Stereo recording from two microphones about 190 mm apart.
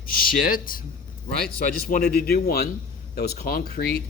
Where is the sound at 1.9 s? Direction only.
50° left (ahead or behind).